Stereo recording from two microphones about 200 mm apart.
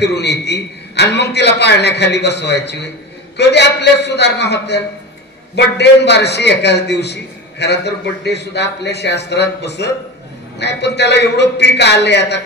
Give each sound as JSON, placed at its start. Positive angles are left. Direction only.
{"t": 0.0, "sound": "a man's voice", "side_deg": 55}